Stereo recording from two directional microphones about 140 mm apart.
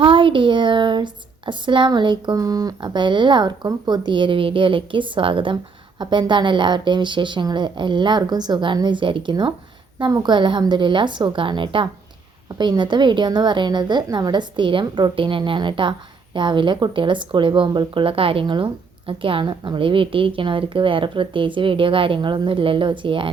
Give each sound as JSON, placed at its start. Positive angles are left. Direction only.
{"t": 0.0, "sound": "a woman's voice", "side_deg": -40}